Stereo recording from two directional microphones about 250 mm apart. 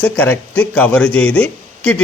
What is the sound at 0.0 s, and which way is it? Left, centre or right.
A man's voice, centre.